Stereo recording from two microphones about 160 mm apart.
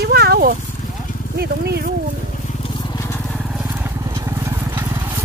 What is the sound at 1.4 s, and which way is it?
Speech, 80° right.